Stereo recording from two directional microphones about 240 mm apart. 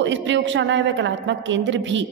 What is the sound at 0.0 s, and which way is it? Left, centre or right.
A woman's voice, right.